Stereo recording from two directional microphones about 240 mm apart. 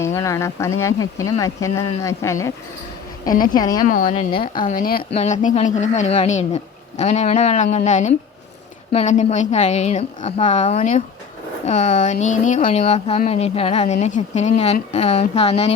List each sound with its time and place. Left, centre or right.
0.0 s speech: centre
3.5 s speech: centre
4.6 s speech: left